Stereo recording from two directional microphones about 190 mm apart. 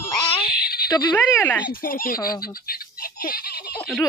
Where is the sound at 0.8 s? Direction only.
20° left (ahead or behind).